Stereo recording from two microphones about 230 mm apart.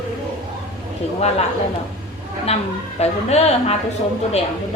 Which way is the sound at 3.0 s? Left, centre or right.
Left.